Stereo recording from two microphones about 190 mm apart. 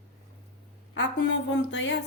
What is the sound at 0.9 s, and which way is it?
A woman's voice, 70° left (ahead or behind).